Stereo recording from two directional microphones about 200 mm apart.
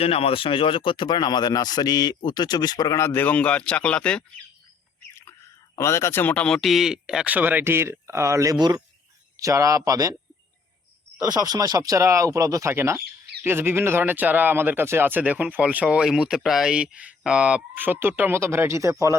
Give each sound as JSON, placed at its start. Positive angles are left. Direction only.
{"t": 0.0, "sound": "speech", "side_deg": 30}
{"t": 5.7, "sound": "speech", "side_deg": 15}
{"t": 11.2, "sound": "speech", "side_deg": -20}